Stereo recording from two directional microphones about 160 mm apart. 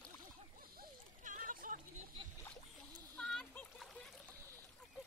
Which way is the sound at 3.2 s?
5° left (ahead or behind).